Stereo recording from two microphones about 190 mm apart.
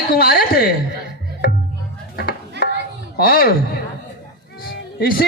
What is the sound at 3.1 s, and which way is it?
A man's voice, 50° left (ahead or behind).